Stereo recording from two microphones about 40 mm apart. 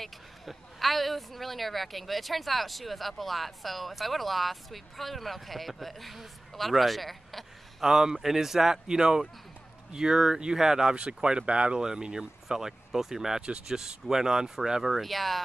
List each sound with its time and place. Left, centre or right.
0.0 s speech: centre
7.8 s speech: centre
13.4 s speech: right
13.7 s speech: centre